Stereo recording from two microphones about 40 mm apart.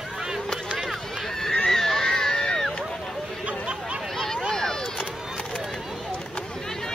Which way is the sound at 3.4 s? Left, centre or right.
Right.